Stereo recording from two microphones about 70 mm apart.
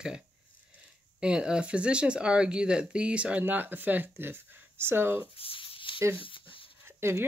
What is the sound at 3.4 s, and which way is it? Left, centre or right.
Speech, right.